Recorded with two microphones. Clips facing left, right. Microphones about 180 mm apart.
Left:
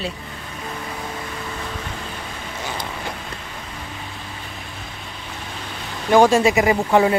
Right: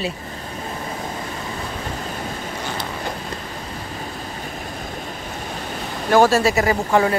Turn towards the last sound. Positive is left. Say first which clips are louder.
# left 2 dB
turn(degrees=15)  # may be behind; listen again after turning